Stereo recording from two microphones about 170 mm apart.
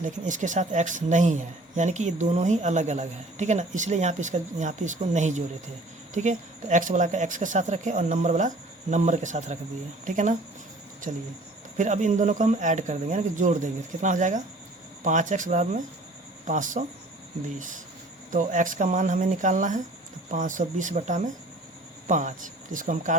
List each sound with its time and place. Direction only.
0.0 s speech: 45° right (ahead or behind)
11.1 s speech: 50° right (ahead or behind)
18.3 s speech: 50° right (ahead or behind)